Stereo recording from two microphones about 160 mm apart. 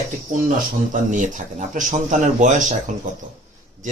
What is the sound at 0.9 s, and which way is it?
Speech, 50° right (ahead or behind).